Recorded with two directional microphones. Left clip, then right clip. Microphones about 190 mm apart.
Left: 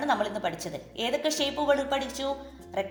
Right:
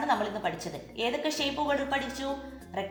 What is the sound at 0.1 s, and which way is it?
A woman's voice, 50° left (ahead or behind).